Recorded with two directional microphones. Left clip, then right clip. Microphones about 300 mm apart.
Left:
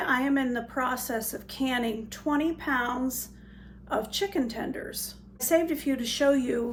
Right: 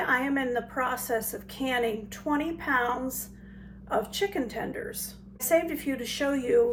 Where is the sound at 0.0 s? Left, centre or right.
Centre.